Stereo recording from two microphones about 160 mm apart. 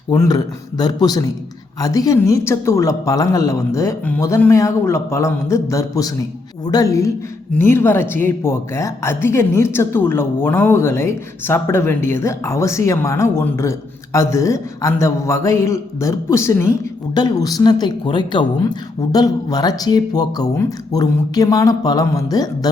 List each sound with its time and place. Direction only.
0.1 s speech: 20° left (ahead or behind)